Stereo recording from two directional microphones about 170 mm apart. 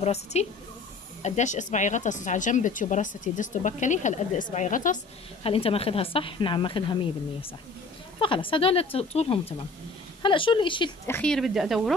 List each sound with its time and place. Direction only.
0.0 s a woman's voice: 40° left (ahead or behind)
5.4 s a woman's voice: 35° left (ahead or behind)
8.2 s a woman's voice: 30° left (ahead or behind)
11.1 s speech: 10° left (ahead or behind)